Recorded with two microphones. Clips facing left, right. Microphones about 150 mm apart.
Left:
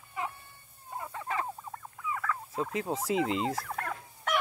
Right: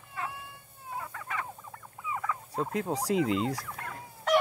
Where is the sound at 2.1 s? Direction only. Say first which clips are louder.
Even; 15° right (ahead or behind).